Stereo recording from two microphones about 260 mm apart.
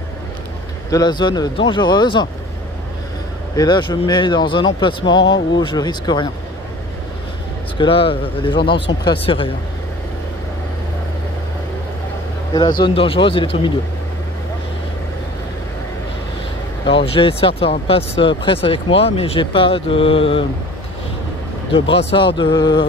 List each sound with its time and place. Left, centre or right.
0.8 s speech: centre
3.5 s speech: centre
7.7 s speech: centre
12.5 s speech: centre
16.8 s speech: left
21.7 s speech: left